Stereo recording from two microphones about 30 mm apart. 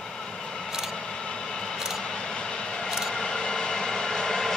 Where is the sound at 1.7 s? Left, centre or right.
Centre.